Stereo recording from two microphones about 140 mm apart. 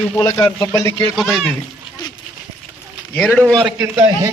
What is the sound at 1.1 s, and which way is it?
Speech, 5° left (ahead or behind).